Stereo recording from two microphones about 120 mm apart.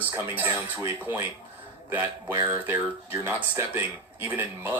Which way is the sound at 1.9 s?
15° right (ahead or behind).